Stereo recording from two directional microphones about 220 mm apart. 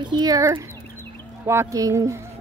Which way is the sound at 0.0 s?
20° right (ahead or behind).